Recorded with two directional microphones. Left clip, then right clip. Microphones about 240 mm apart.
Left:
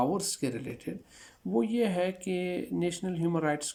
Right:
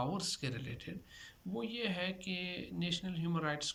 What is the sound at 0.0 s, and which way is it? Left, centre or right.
Speech, left.